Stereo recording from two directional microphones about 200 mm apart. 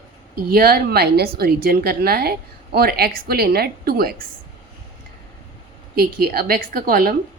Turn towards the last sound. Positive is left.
turn(degrees=-45)  # may be behind; listen again after turning